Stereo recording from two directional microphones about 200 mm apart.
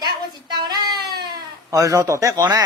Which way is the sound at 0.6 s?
20° right (ahead or behind).